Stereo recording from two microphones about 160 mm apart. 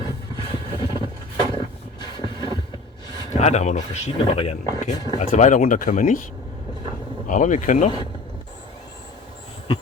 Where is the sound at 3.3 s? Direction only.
45° left (ahead or behind).